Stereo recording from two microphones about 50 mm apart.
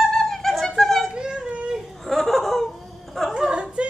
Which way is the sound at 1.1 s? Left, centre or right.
Centre.